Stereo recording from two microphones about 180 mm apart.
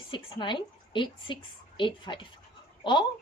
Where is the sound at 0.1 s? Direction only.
25° left (ahead or behind).